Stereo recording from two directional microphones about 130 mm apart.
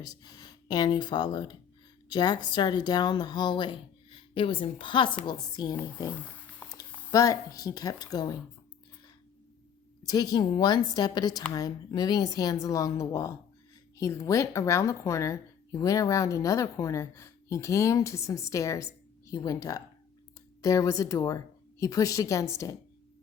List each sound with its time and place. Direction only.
0.0 s a woman's voice: 30° left (ahead or behind)
6.1 s a sound: 10° left (ahead or behind)
7.1 s a woman's voice: 25° left (ahead or behind)
10.0 s a woman's voice: 30° left (ahead or behind)